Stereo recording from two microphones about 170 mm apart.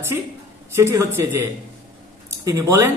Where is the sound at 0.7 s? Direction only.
15° right (ahead or behind).